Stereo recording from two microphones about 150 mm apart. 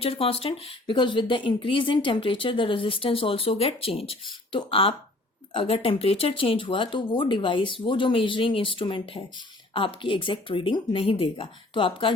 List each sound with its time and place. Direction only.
0.0 s speech: 40° left (ahead or behind)